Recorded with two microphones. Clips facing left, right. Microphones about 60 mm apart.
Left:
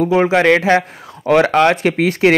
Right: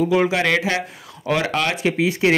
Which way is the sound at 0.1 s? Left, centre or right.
Left.